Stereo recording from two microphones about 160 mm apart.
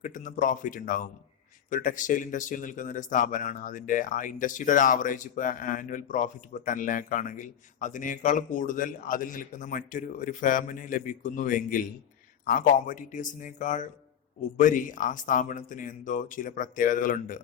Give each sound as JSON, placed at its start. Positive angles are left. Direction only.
{"t": 0.0, "sound": "speech", "side_deg": 55}